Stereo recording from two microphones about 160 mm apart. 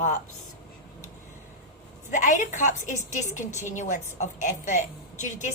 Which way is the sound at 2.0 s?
50° left (ahead or behind).